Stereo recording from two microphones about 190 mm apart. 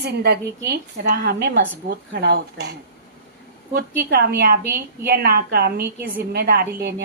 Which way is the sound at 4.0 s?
55° right (ahead or behind).